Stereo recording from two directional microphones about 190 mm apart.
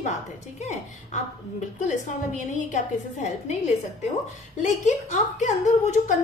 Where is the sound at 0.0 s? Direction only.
40° left (ahead or behind).